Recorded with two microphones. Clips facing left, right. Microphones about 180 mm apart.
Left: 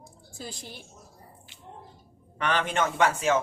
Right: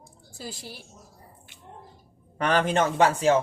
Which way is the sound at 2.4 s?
40° right (ahead or behind).